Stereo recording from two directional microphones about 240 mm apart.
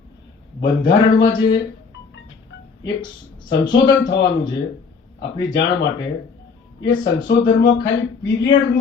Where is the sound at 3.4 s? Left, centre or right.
Centre.